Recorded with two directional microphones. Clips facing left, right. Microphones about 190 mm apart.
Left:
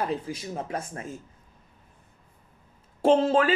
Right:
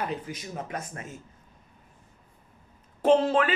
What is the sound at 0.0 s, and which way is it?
Speech, 30° left (ahead or behind).